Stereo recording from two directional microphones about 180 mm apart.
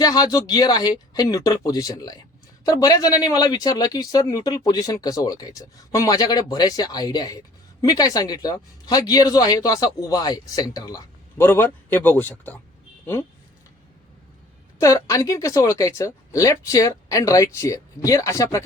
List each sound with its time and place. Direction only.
0.0 s speech: 20° left (ahead or behind)
14.8 s speech: 15° left (ahead or behind)